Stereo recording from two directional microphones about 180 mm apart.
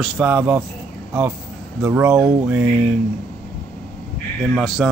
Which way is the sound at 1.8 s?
10° right (ahead or behind).